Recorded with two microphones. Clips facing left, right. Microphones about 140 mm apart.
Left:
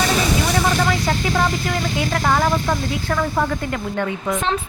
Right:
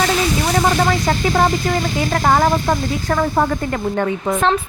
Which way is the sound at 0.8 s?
45° right (ahead or behind).